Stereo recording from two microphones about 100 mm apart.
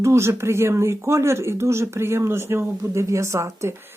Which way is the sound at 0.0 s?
25° right (ahead or behind).